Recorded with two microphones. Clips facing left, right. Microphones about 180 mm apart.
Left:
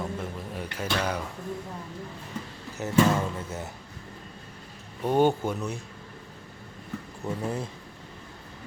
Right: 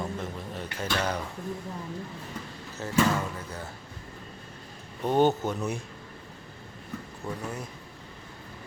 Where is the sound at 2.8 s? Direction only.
20° left (ahead or behind).